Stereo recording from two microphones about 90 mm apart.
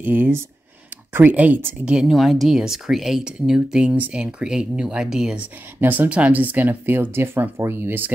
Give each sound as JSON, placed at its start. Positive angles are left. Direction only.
{"t": 0.0, "sound": "speech", "side_deg": -20}
{"t": 1.9, "sound": "speech", "side_deg": -5}
{"t": 5.8, "sound": "speech", "side_deg": -20}